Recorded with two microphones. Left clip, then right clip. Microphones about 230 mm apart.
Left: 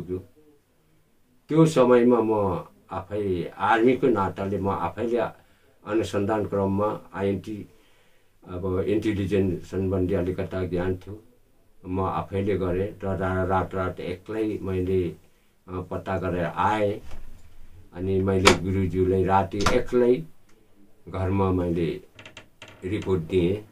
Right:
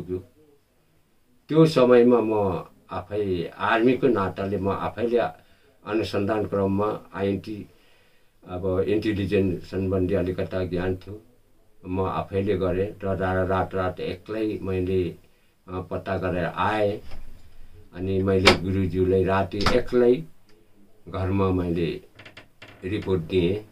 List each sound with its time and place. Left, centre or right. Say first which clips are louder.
1.5 s speech: right 1 dB; centre
17.9 s speech: right 1 dB; centre
22.1 s typing: left 1 dB; left
22.8 s speech: even; centre